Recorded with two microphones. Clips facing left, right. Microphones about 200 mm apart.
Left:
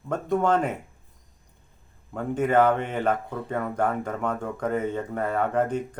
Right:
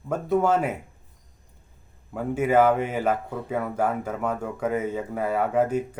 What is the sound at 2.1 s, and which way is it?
Speech, 5° right (ahead or behind).